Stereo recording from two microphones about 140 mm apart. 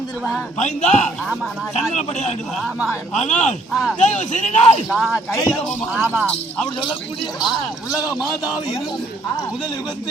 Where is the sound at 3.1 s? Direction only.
55° left (ahead or behind).